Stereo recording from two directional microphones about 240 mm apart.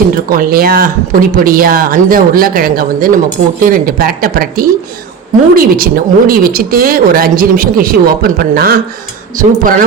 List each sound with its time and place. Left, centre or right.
0.3 s speech: right